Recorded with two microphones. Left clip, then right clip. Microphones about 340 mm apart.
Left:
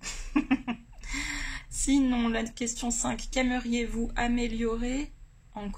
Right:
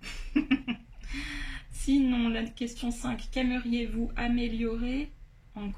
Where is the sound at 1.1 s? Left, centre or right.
Centre.